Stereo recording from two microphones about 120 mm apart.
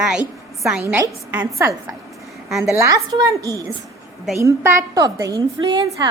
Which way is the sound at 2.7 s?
25° right (ahead or behind).